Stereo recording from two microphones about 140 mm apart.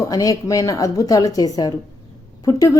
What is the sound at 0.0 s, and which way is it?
A woman's voice, 25° left (ahead or behind).